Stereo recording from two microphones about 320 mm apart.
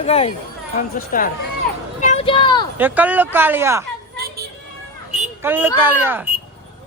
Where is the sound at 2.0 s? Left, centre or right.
Left.